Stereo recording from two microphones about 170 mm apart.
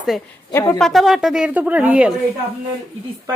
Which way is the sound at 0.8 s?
Centre (ahead or behind).